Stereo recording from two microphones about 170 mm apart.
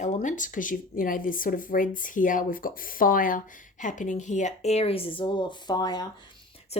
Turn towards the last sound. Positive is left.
turn(degrees=40)  # may be behind; listen again after turning